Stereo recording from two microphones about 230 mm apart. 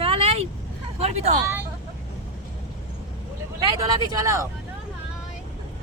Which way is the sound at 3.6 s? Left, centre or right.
Centre.